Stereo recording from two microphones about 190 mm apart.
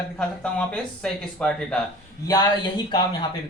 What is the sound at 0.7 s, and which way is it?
Speech, 5° left (ahead or behind).